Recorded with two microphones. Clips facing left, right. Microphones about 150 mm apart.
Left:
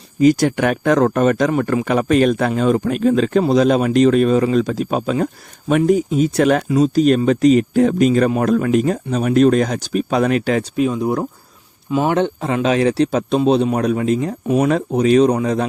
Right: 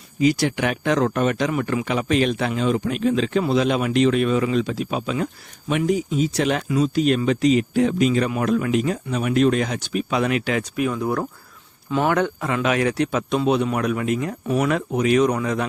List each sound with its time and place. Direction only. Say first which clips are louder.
0.2 s a man's voice: left 6 dB; 45° left (ahead or behind)
6.7 s speech: left 5 dB; 35° left (ahead or behind)
10.8 s speech: left 5 dB; 20° left (ahead or behind)
14.7 s speech: left 5 dB; 35° left (ahead or behind)